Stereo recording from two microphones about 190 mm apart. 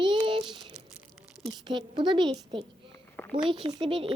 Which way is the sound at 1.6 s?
25° right (ahead or behind).